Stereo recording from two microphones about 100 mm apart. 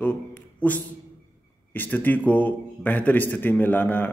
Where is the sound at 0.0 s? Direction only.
15° left (ahead or behind).